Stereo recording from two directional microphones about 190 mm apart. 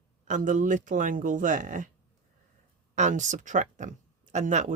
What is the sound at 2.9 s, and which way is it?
Speech, 40° right (ahead or behind).